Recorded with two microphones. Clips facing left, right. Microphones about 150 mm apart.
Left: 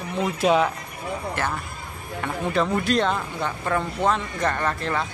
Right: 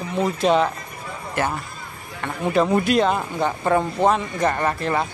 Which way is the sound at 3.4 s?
35° right (ahead or behind).